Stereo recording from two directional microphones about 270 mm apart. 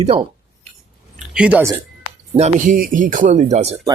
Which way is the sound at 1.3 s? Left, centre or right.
Centre.